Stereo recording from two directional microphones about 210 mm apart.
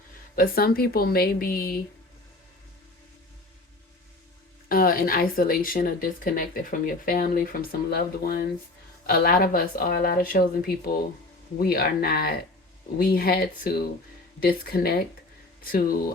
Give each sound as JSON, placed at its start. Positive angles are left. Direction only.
{"t": 0.3, "sound": "a woman's voice", "side_deg": 45}
{"t": 4.7, "sound": "a woman's voice", "side_deg": 45}
{"t": 11.5, "sound": "a woman's voice", "side_deg": 45}